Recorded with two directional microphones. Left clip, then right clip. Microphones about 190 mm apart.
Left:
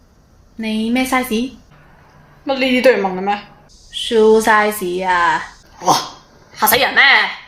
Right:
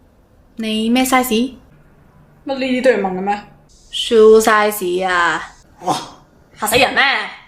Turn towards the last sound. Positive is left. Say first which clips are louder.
# left 3 dB
turn(degrees=0)  # may be behind; listen again after turning